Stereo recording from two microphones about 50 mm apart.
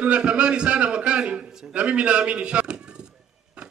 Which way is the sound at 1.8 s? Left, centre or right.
Right.